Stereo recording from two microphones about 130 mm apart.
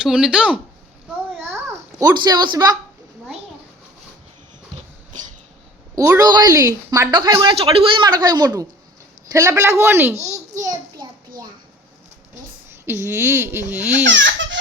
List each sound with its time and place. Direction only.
0.0 s speech: 5° right (ahead or behind)
2.0 s a woman's voice: 30° right (ahead or behind)
6.0 s a woman's voice: 25° right (ahead or behind)
11.0 s a sound: 35° right (ahead or behind)
12.8 s speech: 20° right (ahead or behind)